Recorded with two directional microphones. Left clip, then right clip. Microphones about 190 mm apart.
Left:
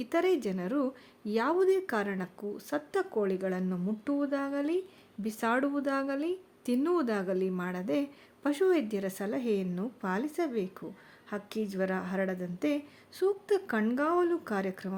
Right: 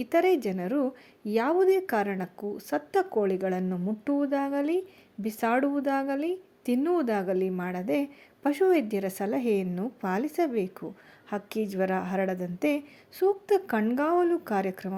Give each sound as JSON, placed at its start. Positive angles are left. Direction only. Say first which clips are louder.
{"t": 0.0, "sound": "a woman's voice", "louder": "right 5 dB", "side_deg": -10}